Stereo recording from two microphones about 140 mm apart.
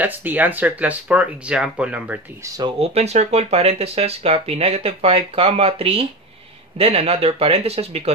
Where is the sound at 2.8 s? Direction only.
50° right (ahead or behind).